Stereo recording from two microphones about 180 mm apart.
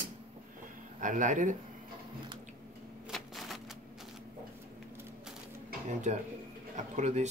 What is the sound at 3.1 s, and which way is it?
Typewriter, centre (ahead or behind).